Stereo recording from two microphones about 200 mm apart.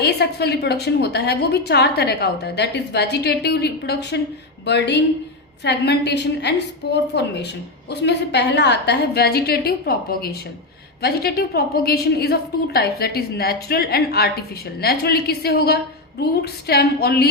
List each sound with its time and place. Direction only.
0.0 s a woman's voice: 55° left (ahead or behind)